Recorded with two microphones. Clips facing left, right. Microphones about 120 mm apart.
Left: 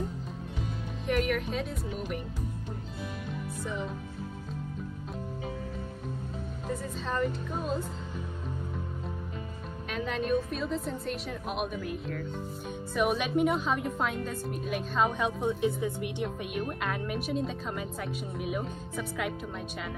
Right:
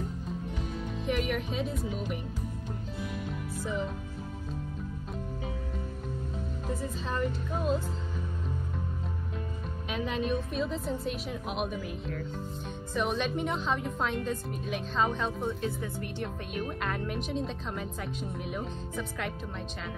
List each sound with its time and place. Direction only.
1.0 s speech: centre (ahead or behind)
3.6 s speech: centre (ahead or behind)
6.7 s speech: centre (ahead or behind)
9.8 s speech: centre (ahead or behind); by 16.3 s 15° left (ahead or behind)
16.5 s speech: centre (ahead or behind)